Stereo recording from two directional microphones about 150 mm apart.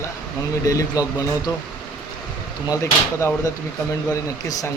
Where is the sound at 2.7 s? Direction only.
20° left (ahead or behind).